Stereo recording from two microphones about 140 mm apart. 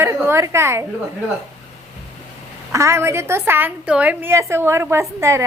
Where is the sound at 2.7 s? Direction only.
20° right (ahead or behind).